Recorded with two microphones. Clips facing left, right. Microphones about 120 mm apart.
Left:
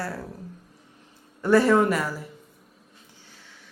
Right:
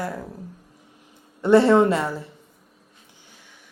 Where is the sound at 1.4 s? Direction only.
25° right (ahead or behind).